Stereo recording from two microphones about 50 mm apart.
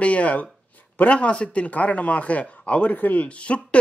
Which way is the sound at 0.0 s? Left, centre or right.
Left.